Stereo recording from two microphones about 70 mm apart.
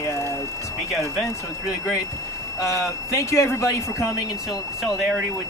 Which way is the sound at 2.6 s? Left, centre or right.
Left.